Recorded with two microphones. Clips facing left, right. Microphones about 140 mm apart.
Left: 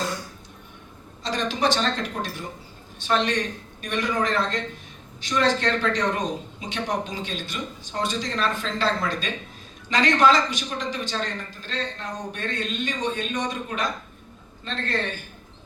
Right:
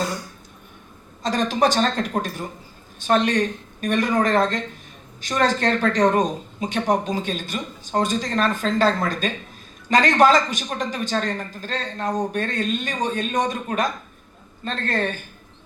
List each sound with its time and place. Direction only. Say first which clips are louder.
1.2 s speech: right 4 dB; 45° right (ahead or behind)